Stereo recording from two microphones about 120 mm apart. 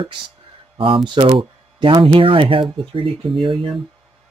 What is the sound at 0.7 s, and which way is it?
Speech, 45° right (ahead or behind).